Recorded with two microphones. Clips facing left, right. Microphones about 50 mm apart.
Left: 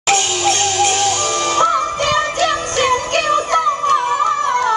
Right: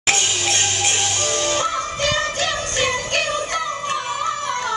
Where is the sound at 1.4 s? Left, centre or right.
Left.